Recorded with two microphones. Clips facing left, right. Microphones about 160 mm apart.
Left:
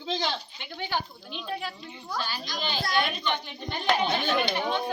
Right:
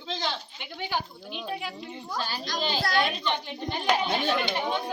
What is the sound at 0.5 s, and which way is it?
Speech, 10° right (ahead or behind).